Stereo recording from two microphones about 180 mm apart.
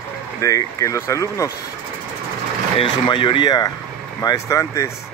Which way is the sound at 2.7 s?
30° left (ahead or behind).